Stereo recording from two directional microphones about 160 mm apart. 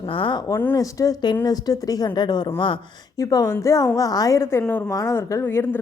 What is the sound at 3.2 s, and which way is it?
Speech, 20° left (ahead or behind).